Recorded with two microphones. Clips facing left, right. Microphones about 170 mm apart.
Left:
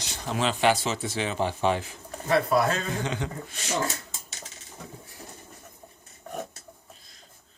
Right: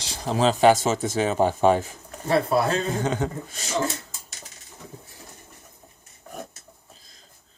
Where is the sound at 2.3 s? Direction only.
30° right (ahead or behind).